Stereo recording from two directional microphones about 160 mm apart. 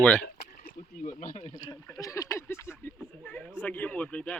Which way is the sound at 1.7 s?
20° left (ahead or behind).